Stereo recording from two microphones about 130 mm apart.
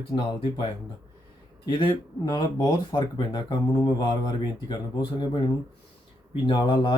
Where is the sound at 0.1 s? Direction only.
40° left (ahead or behind).